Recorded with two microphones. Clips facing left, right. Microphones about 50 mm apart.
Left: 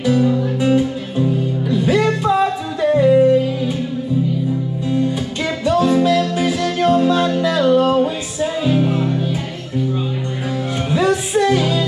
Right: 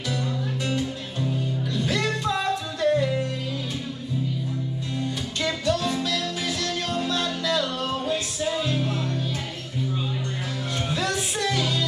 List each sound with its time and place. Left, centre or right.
0.0 s music: centre
4.9 s music: centre
10.9 s music: centre